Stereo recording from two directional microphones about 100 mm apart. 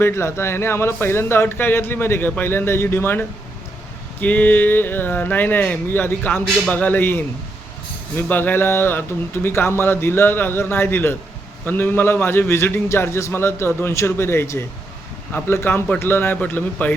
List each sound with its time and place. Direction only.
0.0 s speech: 25° left (ahead or behind)
15.3 s speech: 15° left (ahead or behind)